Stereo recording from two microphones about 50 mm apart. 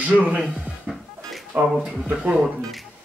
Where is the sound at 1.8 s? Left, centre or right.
Centre.